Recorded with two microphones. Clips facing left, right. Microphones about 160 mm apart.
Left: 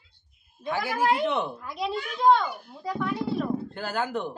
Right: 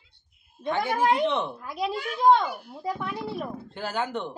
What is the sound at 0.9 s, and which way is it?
Speech, 20° right (ahead or behind).